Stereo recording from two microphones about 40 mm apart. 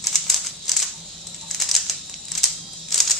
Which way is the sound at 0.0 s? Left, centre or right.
Centre.